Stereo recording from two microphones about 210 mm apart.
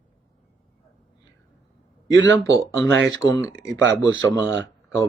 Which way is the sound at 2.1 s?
60° right (ahead or behind).